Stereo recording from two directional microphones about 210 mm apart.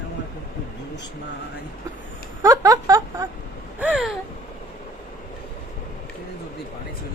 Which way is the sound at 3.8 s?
5° right (ahead or behind).